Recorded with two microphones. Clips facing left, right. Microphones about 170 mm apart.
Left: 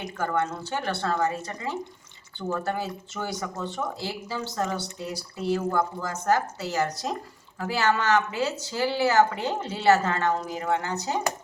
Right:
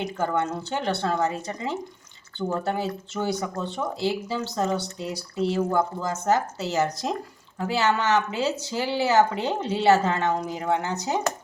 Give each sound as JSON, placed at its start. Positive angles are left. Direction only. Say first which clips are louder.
{"t": 0.0, "sound": "speech", "louder": "right 2 dB", "side_deg": -20}